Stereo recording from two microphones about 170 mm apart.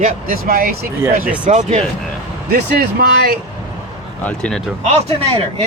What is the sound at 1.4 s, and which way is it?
Speech, 45° right (ahead or behind).